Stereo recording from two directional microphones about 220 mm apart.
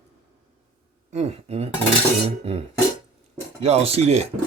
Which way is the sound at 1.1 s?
30° right (ahead or behind).